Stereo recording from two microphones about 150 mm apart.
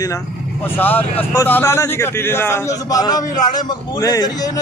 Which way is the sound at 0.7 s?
10° left (ahead or behind).